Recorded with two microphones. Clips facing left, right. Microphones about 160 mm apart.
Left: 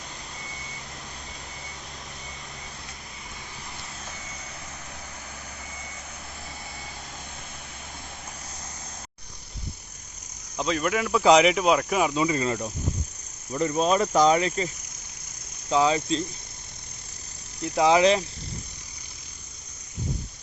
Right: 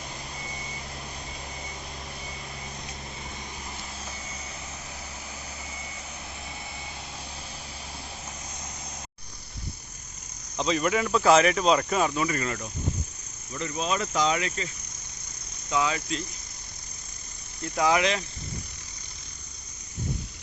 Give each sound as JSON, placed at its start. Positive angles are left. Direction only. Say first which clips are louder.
{"t": 10.6, "sound": "speech", "louder": "even", "side_deg": 0}
{"t": 11.2, "sound": "speech", "louder": "left 3 dB", "side_deg": 15}
{"t": 12.1, "sound": "speech", "louder": "left 4 dB", "side_deg": 20}
{"t": 13.5, "sound": "speech", "louder": "left 7 dB", "side_deg": 40}
{"t": 15.7, "sound": "speech", "louder": "left 5 dB", "side_deg": 30}
{"t": 17.6, "sound": "speech", "louder": "left 4 dB", "side_deg": 25}